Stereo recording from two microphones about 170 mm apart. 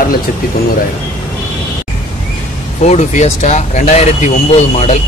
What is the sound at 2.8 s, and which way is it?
Speech, 40° left (ahead or behind).